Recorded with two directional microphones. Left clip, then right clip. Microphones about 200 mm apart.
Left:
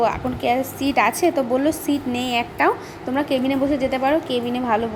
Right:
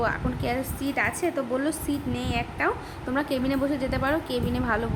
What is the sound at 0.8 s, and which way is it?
Speech, 15° left (ahead or behind).